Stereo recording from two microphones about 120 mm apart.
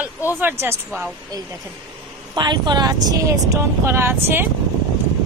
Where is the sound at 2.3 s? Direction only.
35° right (ahead or behind); by 4.5 s 20° right (ahead or behind).